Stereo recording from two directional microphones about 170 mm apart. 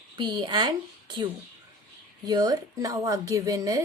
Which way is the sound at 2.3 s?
25° right (ahead or behind).